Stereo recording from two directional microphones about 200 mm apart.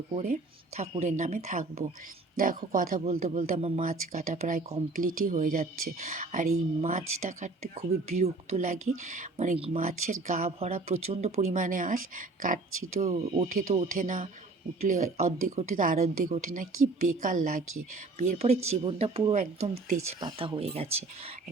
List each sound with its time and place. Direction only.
0.1 s speech: 30° right (ahead or behind)
3.0 s speech: 30° right (ahead or behind)
13.0 s speech: 30° right (ahead or behind)
18.2 s speech: 30° right (ahead or behind)